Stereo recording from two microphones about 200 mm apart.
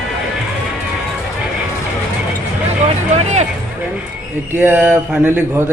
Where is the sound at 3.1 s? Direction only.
35° right (ahead or behind).